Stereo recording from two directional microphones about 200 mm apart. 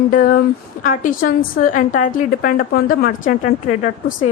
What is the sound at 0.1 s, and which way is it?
A woman's voice, 45° left (ahead or behind).